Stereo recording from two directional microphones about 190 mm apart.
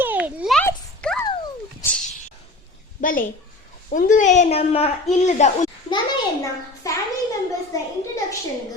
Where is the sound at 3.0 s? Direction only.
45° left (ahead or behind).